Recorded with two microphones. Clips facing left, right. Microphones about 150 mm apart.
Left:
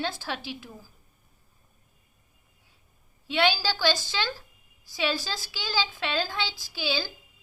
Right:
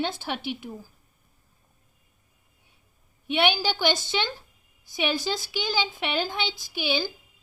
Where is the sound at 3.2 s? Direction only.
20° right (ahead or behind).